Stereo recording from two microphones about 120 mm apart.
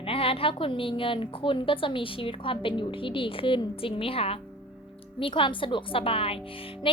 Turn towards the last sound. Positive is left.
turn(degrees=45)  # may be behind; listen again after turning